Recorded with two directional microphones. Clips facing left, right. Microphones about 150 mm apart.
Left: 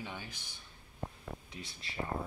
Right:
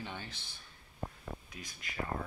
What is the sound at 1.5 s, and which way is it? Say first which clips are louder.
Speech: left 1 dB; 30° left (ahead or behind).